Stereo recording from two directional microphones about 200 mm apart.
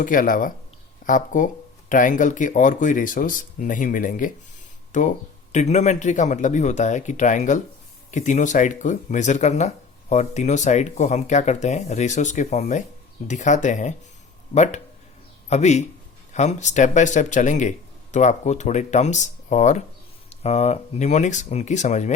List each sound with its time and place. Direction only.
0.0 s a man's voice: 40° left (ahead or behind)